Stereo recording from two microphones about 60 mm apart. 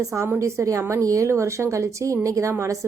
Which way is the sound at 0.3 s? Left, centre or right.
Right.